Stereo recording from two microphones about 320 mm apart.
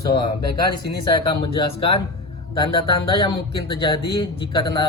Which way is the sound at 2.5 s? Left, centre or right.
Centre.